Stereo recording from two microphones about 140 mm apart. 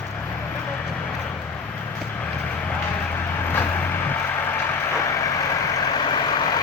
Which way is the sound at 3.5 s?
15° left (ahead or behind).